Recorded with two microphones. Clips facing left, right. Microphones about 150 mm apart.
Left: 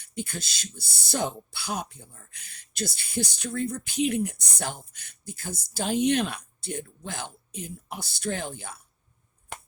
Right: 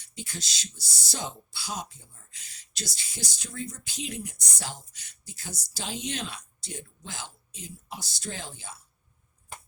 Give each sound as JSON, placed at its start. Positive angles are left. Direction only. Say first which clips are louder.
{"t": 0.0, "sound": "speech", "louder": "left 6 dB", "side_deg": 55}
{"t": 9.5, "sound": "finger snapping", "louder": "left 4 dB", "side_deg": 70}